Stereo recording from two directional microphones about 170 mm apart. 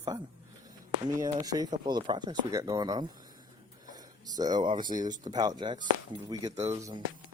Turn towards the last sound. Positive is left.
turn(degrees=-20)  # may be behind; listen again after turning